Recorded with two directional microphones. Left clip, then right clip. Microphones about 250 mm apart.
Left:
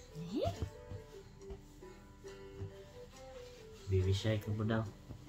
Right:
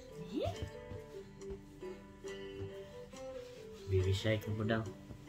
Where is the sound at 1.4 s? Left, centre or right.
Right.